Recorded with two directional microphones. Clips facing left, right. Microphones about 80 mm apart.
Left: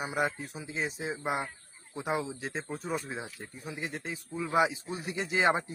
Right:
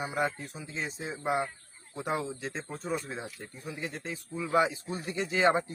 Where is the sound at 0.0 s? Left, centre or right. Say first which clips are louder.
Even; centre.